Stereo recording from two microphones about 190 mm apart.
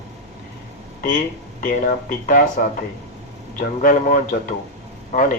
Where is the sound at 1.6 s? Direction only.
45° left (ahead or behind).